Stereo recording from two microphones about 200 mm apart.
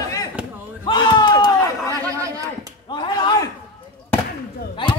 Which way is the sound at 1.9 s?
15° right (ahead or behind).